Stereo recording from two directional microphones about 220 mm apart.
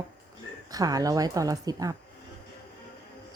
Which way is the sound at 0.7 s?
15° right (ahead or behind).